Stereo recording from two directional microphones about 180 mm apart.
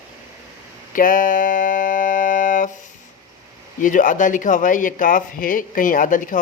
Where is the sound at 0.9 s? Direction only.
50° left (ahead or behind).